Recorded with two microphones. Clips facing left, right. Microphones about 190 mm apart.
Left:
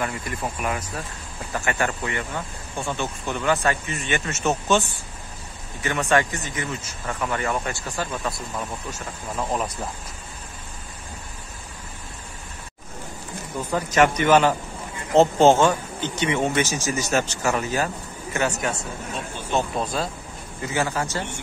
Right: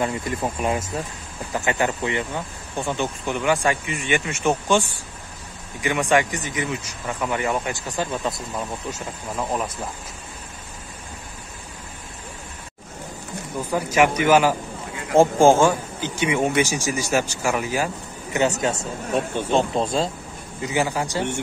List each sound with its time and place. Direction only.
0.0 s speech: 25° right (ahead or behind)
9.4 s speech: 5° right (ahead or behind)
13.6 s speech: 10° right (ahead or behind)
18.8 s speech: 60° right (ahead or behind)
19.5 s speech: 25° right (ahead or behind)
20.6 s speech: 15° right (ahead or behind)